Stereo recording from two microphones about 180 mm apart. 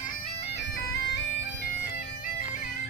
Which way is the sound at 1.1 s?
75° left (ahead or behind).